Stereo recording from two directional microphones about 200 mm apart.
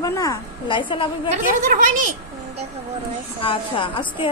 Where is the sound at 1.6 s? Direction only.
40° right (ahead or behind).